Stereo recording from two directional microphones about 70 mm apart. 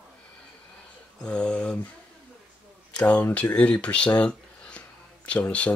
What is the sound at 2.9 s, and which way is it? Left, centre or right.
Speech, centre.